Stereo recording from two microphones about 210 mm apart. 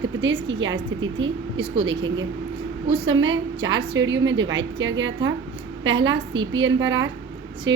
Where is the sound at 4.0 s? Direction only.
60° right (ahead or behind).